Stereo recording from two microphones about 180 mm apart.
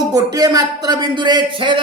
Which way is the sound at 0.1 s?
20° right (ahead or behind).